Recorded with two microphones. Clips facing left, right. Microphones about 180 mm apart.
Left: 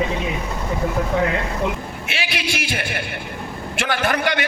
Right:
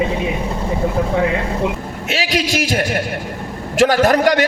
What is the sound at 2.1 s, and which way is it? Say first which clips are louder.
A man's voice: right 8 dB; 40° right (ahead or behind).